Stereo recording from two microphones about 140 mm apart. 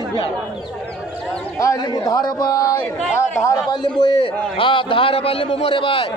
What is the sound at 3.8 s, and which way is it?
A man's voice, 35° left (ahead or behind).